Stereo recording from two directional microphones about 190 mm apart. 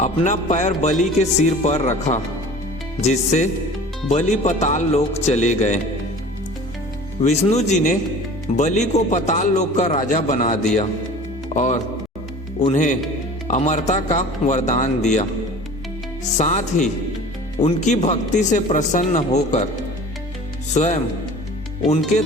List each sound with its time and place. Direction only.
0.0 s speech: 40° left (ahead or behind)
7.2 s speech: 35° left (ahead or behind)
16.4 s speech: 40° left (ahead or behind)
20.7 s speech: 40° left (ahead or behind)